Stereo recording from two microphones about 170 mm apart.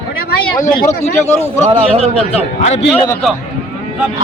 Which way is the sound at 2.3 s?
40° left (ahead or behind).